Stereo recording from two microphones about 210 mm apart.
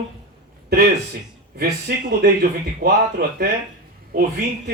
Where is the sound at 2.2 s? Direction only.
50° right (ahead or behind).